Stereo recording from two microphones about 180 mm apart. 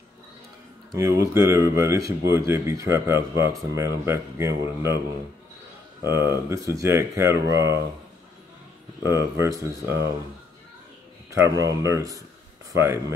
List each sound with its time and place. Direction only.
0.9 s speech: 15° right (ahead or behind)
6.0 s speech: 15° right (ahead or behind)
9.0 s speech: 15° right (ahead or behind)
11.2 s speech: 20° right (ahead or behind)